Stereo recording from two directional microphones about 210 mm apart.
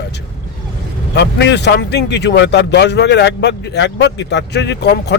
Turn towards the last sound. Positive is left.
turn(degrees=50)  # may be behind; listen again after turning